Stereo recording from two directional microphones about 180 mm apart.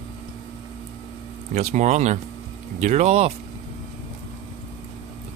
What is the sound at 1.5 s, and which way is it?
Speech, 40° right (ahead or behind).